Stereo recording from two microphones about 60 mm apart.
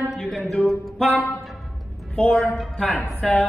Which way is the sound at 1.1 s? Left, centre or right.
Left.